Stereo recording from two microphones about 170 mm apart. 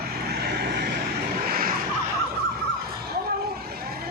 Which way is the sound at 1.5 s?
55° right (ahead or behind).